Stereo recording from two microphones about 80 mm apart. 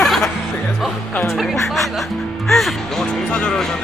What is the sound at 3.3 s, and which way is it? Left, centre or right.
Music, centre.